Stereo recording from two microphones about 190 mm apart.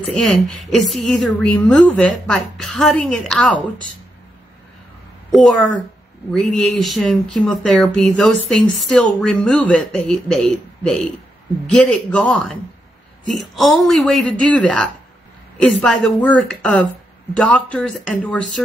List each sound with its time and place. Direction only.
0.1 s a woman's voice: centre (ahead or behind)
6.5 s a woman's voice: centre (ahead or behind)